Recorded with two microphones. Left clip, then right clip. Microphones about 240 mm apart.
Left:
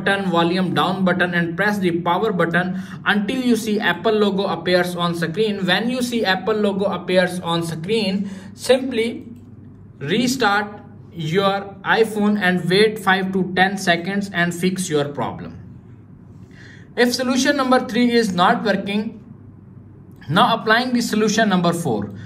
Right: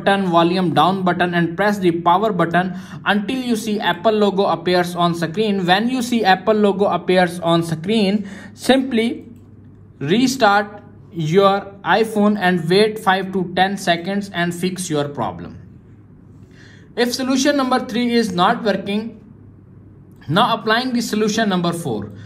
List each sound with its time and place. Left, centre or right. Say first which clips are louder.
0.0 s a man's voice: right 3 dB; right
16.9 s a man's voice: left 1 dB; centre
20.2 s a man's voice: even; centre